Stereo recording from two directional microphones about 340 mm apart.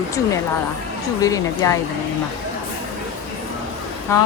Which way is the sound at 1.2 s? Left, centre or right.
Centre.